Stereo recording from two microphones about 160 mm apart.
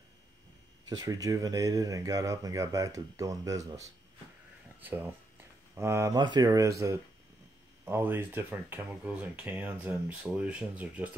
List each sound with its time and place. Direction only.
0.8 s speech: 25° right (ahead or behind)
7.8 s speech: 15° right (ahead or behind)